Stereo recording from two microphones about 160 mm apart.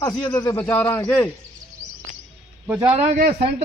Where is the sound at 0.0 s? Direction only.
20° left (ahead or behind).